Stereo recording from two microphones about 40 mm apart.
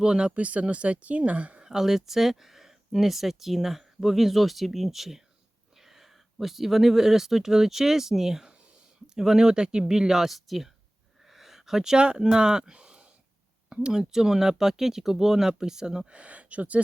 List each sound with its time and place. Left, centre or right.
0.0 s speech: centre
0.3 s speech: right
1.6 s speech: centre; by 16.8 s right